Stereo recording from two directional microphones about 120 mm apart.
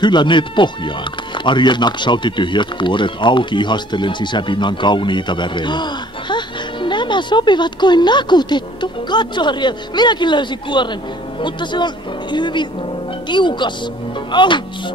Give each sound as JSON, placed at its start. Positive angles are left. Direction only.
{"t": 0.0, "sound": "speech", "side_deg": 40}